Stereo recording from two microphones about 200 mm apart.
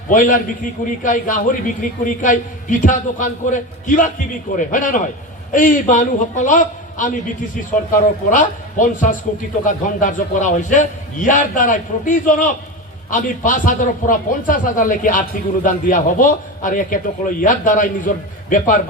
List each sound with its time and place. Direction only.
0.1 s a man's voice: 40° left (ahead or behind)